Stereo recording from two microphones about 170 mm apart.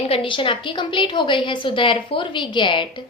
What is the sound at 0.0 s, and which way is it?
A woman's voice, 35° left (ahead or behind).